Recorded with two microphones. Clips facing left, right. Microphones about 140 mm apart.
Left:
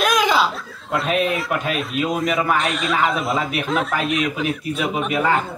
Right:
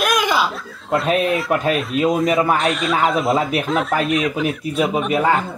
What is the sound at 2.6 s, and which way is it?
Speech, centre (ahead or behind).